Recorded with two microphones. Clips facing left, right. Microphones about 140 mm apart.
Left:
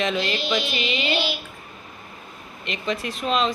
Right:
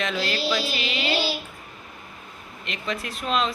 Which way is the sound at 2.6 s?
Centre (ahead or behind).